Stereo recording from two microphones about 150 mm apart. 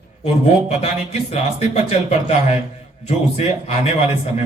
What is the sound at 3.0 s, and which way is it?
Speech, 45° left (ahead or behind).